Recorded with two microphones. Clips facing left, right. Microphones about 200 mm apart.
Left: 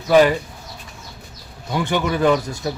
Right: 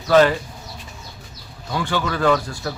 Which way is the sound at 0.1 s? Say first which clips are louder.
Left 1 dB; 15° left (ahead or behind).